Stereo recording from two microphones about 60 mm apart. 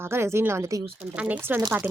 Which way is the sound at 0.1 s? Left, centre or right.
Right.